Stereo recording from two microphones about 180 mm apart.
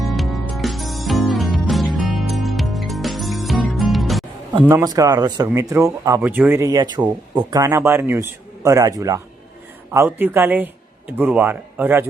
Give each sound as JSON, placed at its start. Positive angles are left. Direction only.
{"t": 0.0, "sound": "music", "side_deg": 0}
{"t": 4.6, "sound": "speech", "side_deg": -15}